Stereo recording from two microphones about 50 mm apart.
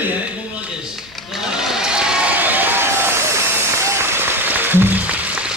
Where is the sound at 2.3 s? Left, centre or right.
Right.